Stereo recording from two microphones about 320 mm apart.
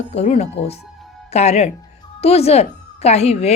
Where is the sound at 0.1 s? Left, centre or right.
Centre.